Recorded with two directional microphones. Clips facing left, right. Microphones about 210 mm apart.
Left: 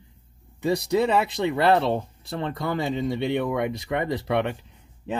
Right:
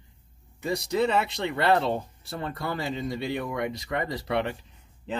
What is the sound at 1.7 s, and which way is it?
Speech, 15° left (ahead or behind).